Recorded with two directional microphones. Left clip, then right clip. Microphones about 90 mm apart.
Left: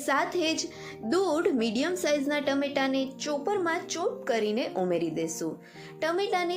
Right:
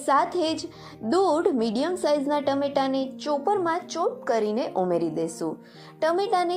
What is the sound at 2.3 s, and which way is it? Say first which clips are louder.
A woman's voice: right 4 dB; 20° right (ahead or behind).